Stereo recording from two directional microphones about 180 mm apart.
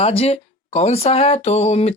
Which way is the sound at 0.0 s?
30° left (ahead or behind).